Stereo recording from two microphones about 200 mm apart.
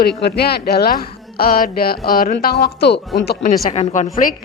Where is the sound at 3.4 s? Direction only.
30° left (ahead or behind).